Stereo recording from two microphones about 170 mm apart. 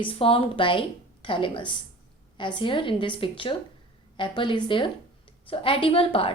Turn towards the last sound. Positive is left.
turn(degrees=35)  # may be behind; listen again after turning